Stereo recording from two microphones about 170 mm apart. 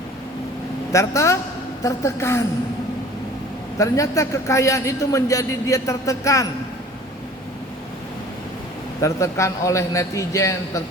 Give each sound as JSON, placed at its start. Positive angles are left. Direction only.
{"t": 0.9, "sound": "a man's voice", "side_deg": 15}
{"t": 3.8, "sound": "a man's voice", "side_deg": 20}
{"t": 9.0, "sound": "a man's voice", "side_deg": 20}